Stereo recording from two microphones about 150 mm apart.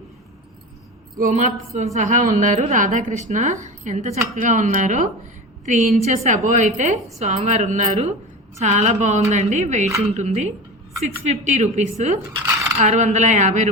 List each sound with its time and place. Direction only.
1.2 s a woman's voice: 55° right (ahead or behind)